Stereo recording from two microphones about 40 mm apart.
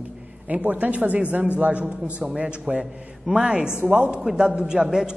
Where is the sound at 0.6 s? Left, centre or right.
Right; by 5.1 s centre.